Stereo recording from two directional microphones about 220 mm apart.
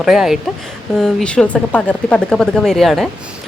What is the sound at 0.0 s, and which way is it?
Speech, centre (ahead or behind).